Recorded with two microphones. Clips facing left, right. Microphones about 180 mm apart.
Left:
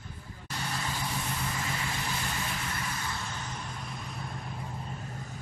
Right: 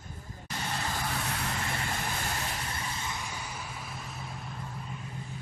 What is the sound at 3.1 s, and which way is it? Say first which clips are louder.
Vehicle: left 1 dB; 10° right (ahead or behind).